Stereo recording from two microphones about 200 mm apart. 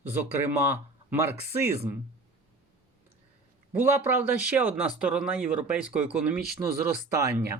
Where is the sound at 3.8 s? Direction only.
10° right (ahead or behind).